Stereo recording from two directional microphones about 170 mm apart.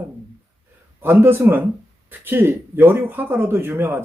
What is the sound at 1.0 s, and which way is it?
Speech, 15° right (ahead or behind).